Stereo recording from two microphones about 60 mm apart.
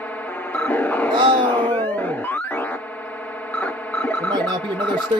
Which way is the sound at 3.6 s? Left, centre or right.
Left.